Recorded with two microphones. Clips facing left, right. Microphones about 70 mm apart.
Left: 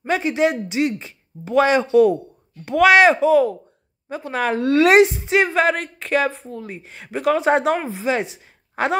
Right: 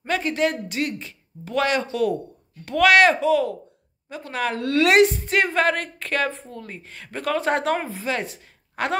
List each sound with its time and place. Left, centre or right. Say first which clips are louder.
0.0 s a woman's voice: left 4 dB; centre